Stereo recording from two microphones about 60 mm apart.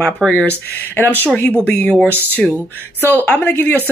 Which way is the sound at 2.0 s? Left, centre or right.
Right.